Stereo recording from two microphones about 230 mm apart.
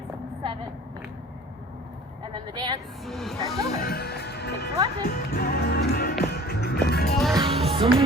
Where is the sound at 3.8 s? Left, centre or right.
Left.